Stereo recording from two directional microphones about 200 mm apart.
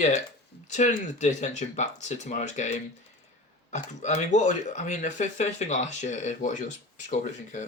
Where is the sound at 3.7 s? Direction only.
35° left (ahead or behind).